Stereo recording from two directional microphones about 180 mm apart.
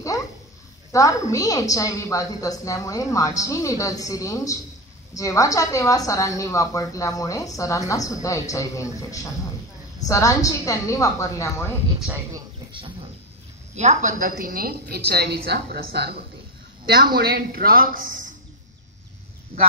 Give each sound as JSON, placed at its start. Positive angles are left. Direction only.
{"t": 0.1, "sound": "a sound", "side_deg": 20}
{"t": 0.9, "sound": "a woman's voice", "side_deg": 20}
{"t": 13.7, "sound": "a woman's voice", "side_deg": -40}